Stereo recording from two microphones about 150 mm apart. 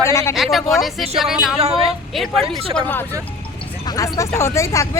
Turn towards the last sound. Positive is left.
turn(degrees=20)  # may be behind; listen again after turning